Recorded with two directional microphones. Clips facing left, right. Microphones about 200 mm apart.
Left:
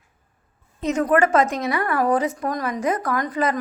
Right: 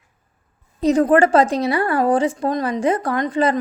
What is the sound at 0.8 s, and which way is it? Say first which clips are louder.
A woman's voice: right 5 dB; 35° right (ahead or behind).